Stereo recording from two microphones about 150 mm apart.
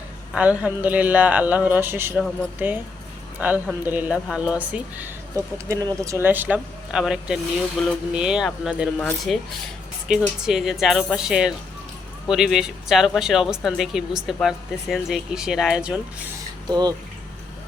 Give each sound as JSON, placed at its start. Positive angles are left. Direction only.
{"t": 0.3, "sound": "speech", "side_deg": -10}
{"t": 16.6, "sound": "speech", "side_deg": -30}